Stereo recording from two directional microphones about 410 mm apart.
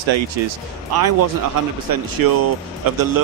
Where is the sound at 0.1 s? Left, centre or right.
Right.